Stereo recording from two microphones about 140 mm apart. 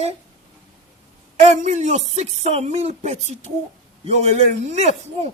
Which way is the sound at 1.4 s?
55° right (ahead or behind).